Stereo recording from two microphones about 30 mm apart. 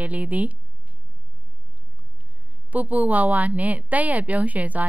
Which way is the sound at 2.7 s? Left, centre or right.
Right.